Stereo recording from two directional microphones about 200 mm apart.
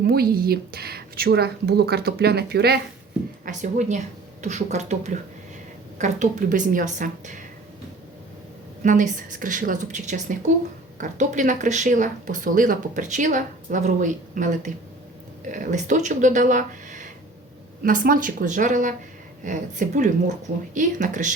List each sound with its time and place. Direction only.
0.1 s speech: 50° right (ahead or behind)
3.4 s speech: 35° right (ahead or behind)
8.8 s speech: 40° right (ahead or behind)